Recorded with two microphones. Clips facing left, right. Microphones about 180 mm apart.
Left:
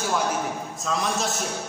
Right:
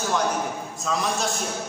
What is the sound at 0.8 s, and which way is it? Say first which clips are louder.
Speech: right 1 dB; centre (ahead or behind).